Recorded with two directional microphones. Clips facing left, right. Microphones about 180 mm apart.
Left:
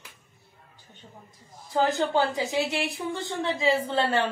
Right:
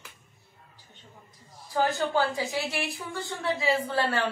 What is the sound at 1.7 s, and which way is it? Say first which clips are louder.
A woman's voice: left 2 dB; 20° left (ahead or behind).